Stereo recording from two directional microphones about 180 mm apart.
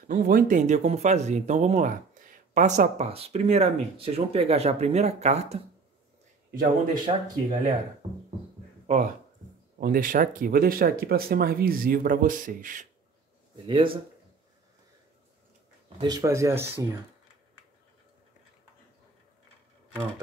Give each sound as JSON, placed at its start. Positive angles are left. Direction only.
{"t": 0.1, "sound": "speech", "side_deg": -50}
{"t": 6.5, "sound": "speech", "side_deg": -50}
{"t": 8.0, "sound": "a sound", "side_deg": -35}
{"t": 9.8, "sound": "speech", "side_deg": -50}
{"t": 13.7, "sound": "speech", "side_deg": -30}
{"t": 16.0, "sound": "speech", "side_deg": -20}